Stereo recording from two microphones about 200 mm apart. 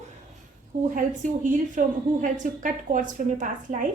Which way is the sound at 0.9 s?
40° right (ahead or behind).